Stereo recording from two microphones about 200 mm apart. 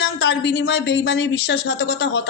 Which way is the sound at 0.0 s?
65° left (ahead or behind).